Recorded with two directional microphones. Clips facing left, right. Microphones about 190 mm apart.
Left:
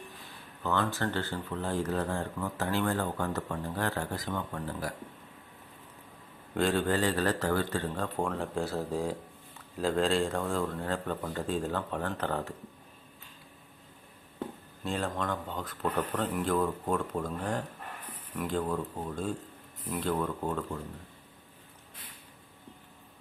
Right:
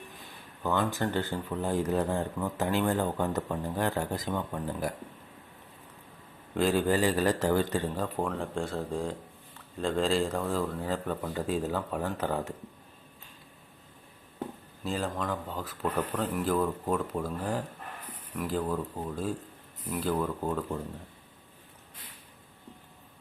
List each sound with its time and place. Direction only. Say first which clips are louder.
0.6 s speech: right 2 dB; 15° right (ahead or behind)
6.5 s speech: right 2 dB; 5° right (ahead or behind)
14.8 s speech: right 1 dB; centre (ahead or behind)